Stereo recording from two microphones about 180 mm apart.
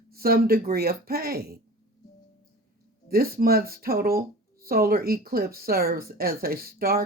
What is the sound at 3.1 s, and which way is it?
Speech, 55° right (ahead or behind).